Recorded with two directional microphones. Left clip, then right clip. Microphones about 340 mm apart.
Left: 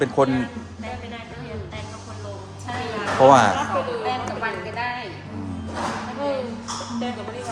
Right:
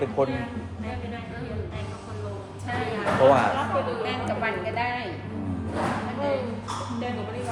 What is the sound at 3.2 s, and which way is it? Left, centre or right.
Speech, left.